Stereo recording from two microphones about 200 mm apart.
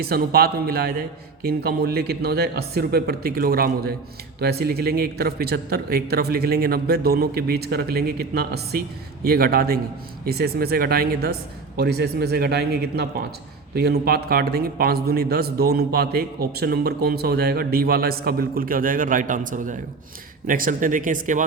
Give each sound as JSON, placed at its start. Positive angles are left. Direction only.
{"t": 0.0, "sound": "speech", "side_deg": -50}